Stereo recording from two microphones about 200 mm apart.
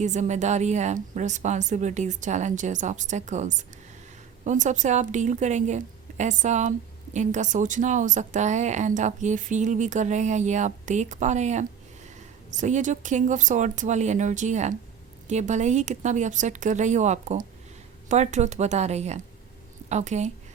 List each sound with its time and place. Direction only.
0.0 s a woman's voice: 35° right (ahead or behind)